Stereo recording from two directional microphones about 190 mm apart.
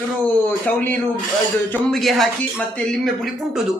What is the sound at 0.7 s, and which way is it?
A woman's voice, 10° left (ahead or behind).